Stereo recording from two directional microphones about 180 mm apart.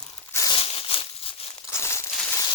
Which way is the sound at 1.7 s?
15° left (ahead or behind).